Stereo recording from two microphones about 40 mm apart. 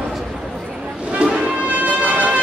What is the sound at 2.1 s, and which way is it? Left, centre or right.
Music, right.